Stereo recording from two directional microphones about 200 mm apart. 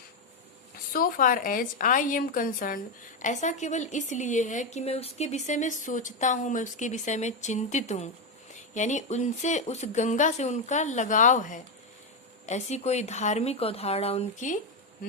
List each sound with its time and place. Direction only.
0.9 s a woman's voice: 45° left (ahead or behind)